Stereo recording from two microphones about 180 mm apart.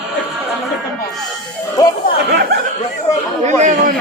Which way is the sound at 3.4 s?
40° right (ahead or behind).